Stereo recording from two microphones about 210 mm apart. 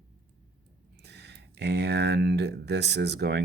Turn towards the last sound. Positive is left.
turn(degrees=-55)  # may be behind; listen again after turning